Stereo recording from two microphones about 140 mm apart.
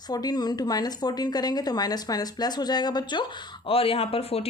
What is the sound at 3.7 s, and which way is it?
Speech, 40° left (ahead or behind).